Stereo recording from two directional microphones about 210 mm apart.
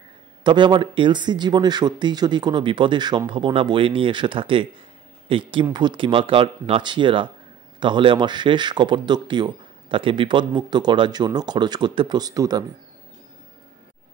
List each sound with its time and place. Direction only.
0.4 s speech: 20° right (ahead or behind)